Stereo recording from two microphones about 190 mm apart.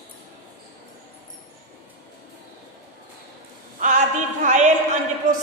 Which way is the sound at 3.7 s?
45° right (ahead or behind).